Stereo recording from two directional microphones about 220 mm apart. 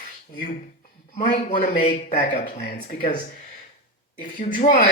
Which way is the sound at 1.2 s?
40° left (ahead or behind).